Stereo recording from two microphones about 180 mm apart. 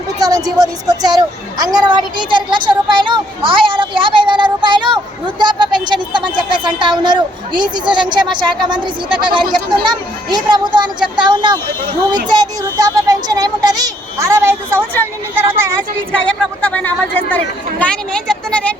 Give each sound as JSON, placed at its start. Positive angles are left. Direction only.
{"t": 0.2, "sound": "speech", "side_deg": -20}
{"t": 16.1, "sound": "speech", "side_deg": 5}